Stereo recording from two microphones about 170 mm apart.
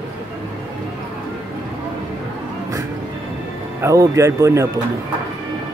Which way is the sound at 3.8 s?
15° right (ahead or behind).